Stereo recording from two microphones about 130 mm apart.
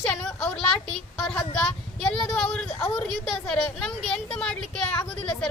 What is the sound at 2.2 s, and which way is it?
A woman's voice, 5° left (ahead or behind).